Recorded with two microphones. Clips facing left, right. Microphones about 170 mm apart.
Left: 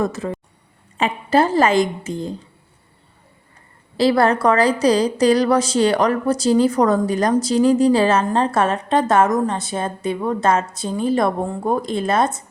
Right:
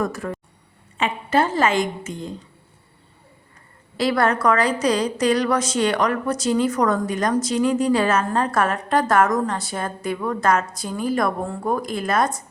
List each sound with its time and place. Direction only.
0.0 s a woman's voice: 25° left (ahead or behind)
0.9 s a woman's voice: 35° left (ahead or behind)
3.9 s a woman's voice: 30° left (ahead or behind)